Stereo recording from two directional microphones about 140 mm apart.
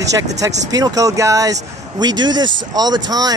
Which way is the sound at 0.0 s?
25° right (ahead or behind).